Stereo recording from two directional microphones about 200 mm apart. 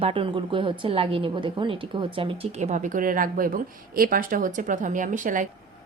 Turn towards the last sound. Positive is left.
turn(degrees=-40)  # may be behind; listen again after turning